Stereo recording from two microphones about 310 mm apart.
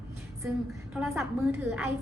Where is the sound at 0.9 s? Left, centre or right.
Centre.